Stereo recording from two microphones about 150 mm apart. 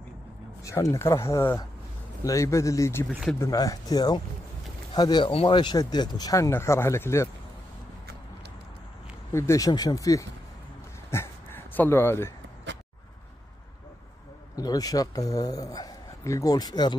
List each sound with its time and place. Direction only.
0.7 s speech: 20° left (ahead or behind)
3.1 s speech: centre (ahead or behind)
3.3 s speech: 25° left (ahead or behind)
9.3 s speech: 20° left (ahead or behind)
11.1 s a sound: 15° left (ahead or behind)
14.5 s a man's voice: 25° left (ahead or behind)